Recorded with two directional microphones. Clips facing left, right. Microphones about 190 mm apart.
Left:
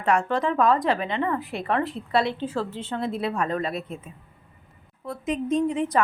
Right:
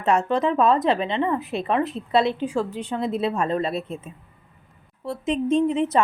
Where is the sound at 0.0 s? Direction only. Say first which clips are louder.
Right 2 dB; 25° right (ahead or behind).